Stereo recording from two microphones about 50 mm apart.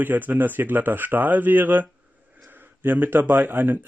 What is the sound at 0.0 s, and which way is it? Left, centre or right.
Speech, right.